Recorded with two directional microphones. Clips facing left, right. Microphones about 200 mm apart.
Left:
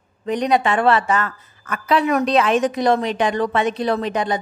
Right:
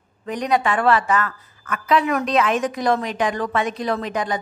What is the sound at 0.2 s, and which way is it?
A woman's voice, 25° left (ahead or behind).